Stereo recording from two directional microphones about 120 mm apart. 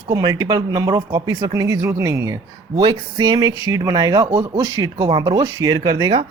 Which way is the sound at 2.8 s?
40° right (ahead or behind).